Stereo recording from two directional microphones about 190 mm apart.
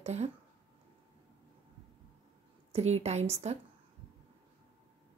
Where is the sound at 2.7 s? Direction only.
35° right (ahead or behind).